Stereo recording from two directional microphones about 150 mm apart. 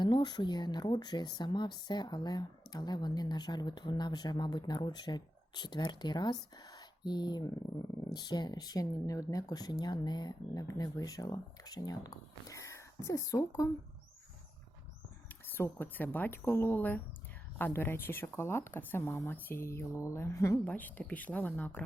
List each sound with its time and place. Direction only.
0.0 s speech: 30° left (ahead or behind)
15.3 s speech: 15° left (ahead or behind)